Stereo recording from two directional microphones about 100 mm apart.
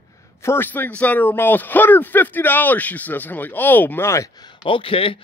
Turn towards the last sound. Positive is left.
turn(degrees=65)  # may be behind; listen again after turning